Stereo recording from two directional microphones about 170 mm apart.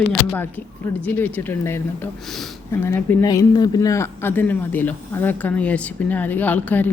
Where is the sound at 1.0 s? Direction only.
10° left (ahead or behind).